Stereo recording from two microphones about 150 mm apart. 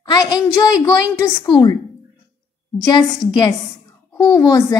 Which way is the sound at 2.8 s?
30° left (ahead or behind).